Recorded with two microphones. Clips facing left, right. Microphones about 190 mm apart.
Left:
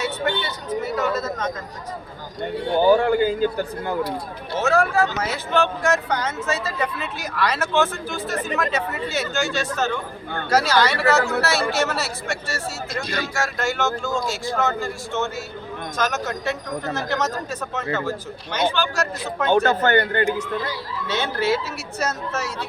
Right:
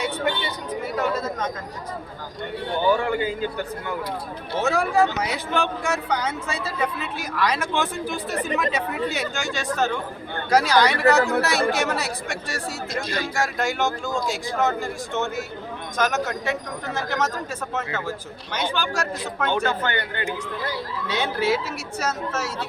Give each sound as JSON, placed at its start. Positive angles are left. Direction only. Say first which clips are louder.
{"t": 0.9, "sound": "speech", "louder": "right 2 dB", "side_deg": -10}
{"t": 2.8, "sound": "a man's voice", "louder": "left 5 dB", "side_deg": 40}
{"t": 4.6, "sound": "speech", "louder": "left 1 dB", "side_deg": -15}
{"t": 18.5, "sound": "speech", "louder": "left 3 dB", "side_deg": -10}
{"t": 19.5, "sound": "speech", "louder": "left 7 dB", "side_deg": 45}
{"t": 21.2, "sound": "speech", "louder": "even", "side_deg": -10}